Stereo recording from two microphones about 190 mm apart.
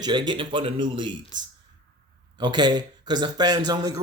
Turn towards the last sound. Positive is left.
turn(degrees=-20)  # may be behind; listen again after turning